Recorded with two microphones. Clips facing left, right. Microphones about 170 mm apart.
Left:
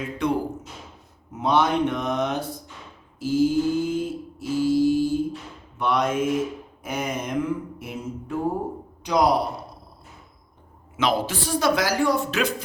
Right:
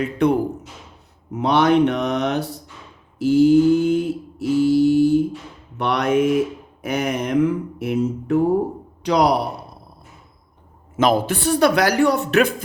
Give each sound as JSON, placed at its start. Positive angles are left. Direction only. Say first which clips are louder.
{"t": 0.0, "sound": "speech", "louder": "right 7 dB", "side_deg": -60}
{"t": 1.3, "sound": "speech", "louder": "right 5 dB", "side_deg": -70}
{"t": 3.2, "sound": "mantra", "louder": "right 7 dB", "side_deg": -70}
{"t": 5.7, "sound": "a man's voice", "louder": "right 4 dB", "side_deg": -70}
{"t": 10.9, "sound": "speech", "louder": "right 6 dB", "side_deg": -50}